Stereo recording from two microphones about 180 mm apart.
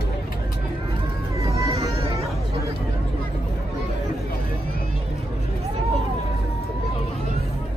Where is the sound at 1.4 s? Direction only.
15° right (ahead or behind).